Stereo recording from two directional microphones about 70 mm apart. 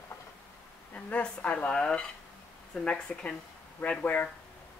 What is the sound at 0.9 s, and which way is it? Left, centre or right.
Speech, centre.